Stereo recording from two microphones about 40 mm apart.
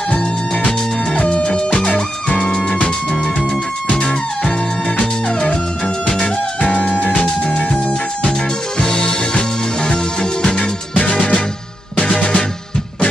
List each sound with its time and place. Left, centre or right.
0.7 s music: left
2.8 s music: left